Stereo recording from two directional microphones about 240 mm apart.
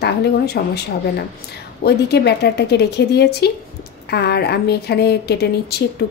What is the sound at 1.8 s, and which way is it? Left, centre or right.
Speech, left.